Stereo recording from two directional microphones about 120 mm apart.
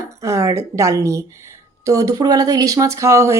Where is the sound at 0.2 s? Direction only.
25° right (ahead or behind).